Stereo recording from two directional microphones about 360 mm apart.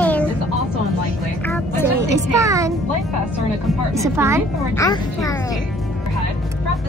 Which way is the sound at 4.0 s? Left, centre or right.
Centre.